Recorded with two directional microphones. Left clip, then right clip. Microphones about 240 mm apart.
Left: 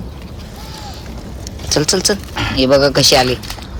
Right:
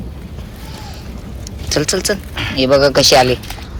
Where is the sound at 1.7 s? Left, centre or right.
Centre.